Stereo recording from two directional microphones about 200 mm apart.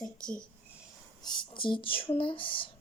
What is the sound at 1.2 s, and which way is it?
Speech, 20° left (ahead or behind).